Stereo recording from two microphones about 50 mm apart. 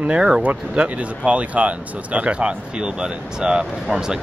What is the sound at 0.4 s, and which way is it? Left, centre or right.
Speech, right.